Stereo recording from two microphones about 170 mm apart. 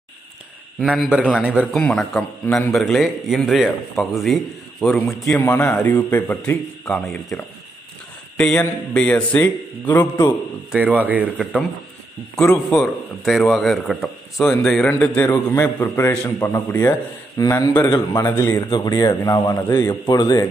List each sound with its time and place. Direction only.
0.7 s a man's voice: 5° right (ahead or behind)
5.4 s speech: 15° left (ahead or behind)
8.4 s speech: 5° left (ahead or behind)
10.7 s speech: 10° right (ahead or behind)
12.4 s a man's voice: 5° left (ahead or behind); by 20.4 s 25° left (ahead or behind)